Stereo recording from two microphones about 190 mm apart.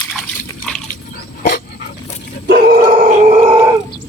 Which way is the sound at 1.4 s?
55° left (ahead or behind).